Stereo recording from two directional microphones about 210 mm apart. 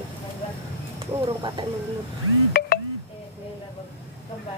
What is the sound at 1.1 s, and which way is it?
Speech, 25° right (ahead or behind).